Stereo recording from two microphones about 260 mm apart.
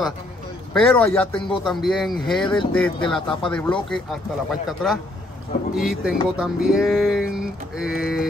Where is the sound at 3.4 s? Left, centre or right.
Centre.